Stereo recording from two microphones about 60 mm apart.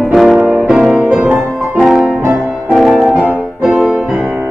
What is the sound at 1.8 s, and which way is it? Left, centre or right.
Music, centre.